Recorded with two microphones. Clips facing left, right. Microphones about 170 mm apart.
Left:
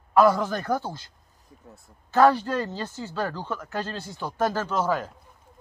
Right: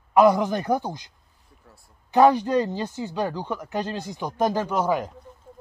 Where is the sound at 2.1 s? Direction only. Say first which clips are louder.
Right 2 dB; 15° right (ahead or behind).